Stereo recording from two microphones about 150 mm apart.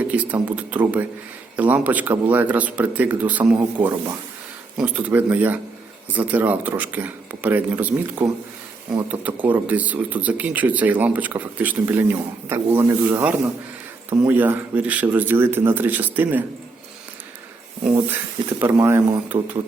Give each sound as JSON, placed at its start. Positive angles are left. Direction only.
{"t": 0.0, "sound": "speech", "side_deg": -10}
{"t": 17.9, "sound": "speech", "side_deg": -15}